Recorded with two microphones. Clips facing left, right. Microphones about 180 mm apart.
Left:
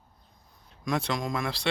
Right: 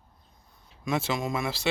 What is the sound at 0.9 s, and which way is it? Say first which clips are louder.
Speech: right 1 dB; 5° right (ahead or behind).